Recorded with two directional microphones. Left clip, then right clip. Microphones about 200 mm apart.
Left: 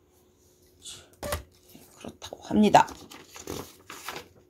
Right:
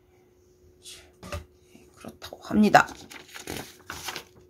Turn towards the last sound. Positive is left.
turn(degrees=-5)  # may be behind; listen again after turning